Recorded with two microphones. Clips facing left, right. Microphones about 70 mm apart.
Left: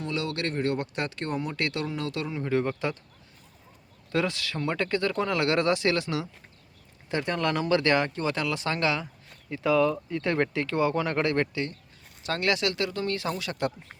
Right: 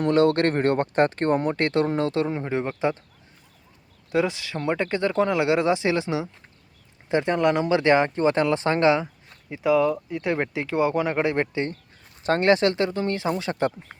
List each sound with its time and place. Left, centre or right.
0.0 s speech: right
4.1 s speech: centre
9.5 s speech: centre; by 13.7 s right